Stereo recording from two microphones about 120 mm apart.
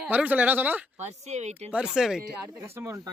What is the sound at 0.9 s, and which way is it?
Speech, 70° right (ahead or behind).